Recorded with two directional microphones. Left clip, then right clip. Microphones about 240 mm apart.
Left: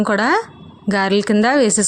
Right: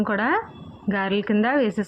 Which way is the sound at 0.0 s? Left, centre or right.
Left.